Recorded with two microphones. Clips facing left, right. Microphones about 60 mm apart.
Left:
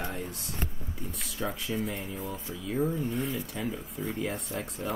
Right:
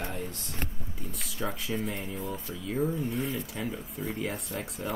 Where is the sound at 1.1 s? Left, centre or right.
Centre.